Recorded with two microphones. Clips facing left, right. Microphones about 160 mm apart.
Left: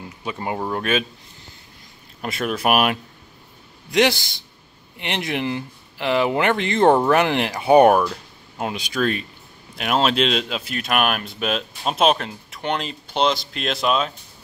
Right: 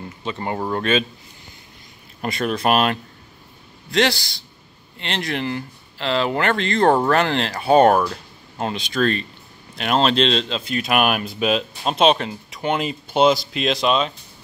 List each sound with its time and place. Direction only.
0.0 s speech: 10° left (ahead or behind)
2.2 s speech: 5° left (ahead or behind)